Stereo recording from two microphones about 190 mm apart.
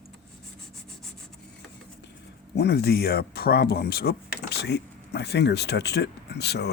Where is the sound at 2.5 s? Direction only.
60° left (ahead or behind).